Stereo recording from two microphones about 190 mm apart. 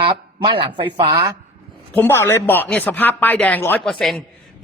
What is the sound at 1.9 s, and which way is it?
Speech, 10° left (ahead or behind).